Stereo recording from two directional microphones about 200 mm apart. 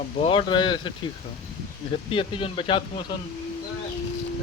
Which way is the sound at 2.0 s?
25° left (ahead or behind).